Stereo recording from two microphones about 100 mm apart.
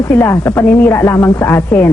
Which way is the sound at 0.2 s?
25° left (ahead or behind).